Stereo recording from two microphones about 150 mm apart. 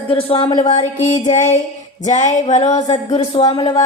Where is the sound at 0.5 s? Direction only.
60° left (ahead or behind).